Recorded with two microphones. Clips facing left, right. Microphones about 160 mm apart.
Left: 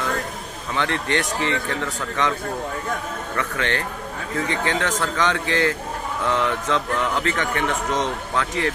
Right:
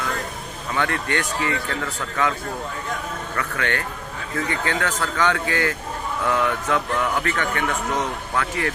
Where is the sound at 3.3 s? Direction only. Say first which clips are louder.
Left 1 dB; 25° left (ahead or behind).